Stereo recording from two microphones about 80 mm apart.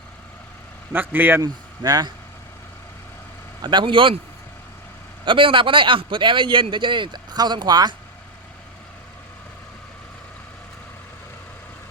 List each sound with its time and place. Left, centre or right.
0.9 s speech: right
1.4 s speech: right
3.6 s a man's voice: right
5.2 s a man's voice: right